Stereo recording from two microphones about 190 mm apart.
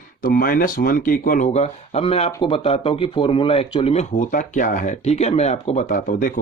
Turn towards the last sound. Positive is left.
turn(degrees=45)  # may be behind; listen again after turning